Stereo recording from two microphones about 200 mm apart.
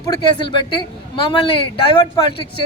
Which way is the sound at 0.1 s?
25° left (ahead or behind).